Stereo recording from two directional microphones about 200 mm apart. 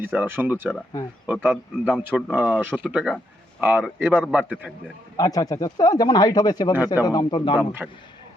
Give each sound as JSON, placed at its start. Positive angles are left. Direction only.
{"t": 0.0, "sound": "speech", "side_deg": -10}
{"t": 5.1, "sound": "speech", "side_deg": 20}